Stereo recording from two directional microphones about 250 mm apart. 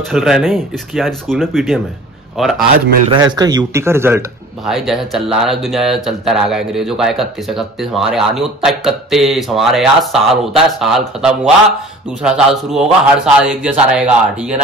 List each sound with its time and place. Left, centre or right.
0.1 s a man's voice: centre
3.1 s a man's voice: centre